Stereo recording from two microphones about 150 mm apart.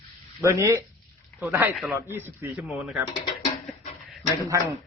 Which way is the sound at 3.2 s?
60° left (ahead or behind).